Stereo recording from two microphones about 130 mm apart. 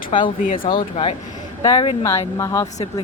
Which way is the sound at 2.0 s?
25° left (ahead or behind).